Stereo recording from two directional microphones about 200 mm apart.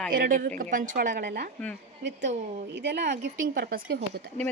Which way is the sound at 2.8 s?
60° right (ahead or behind).